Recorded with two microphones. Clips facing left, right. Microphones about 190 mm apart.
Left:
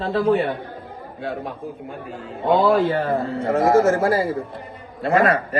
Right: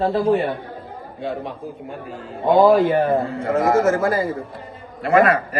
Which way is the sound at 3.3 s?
30° left (ahead or behind).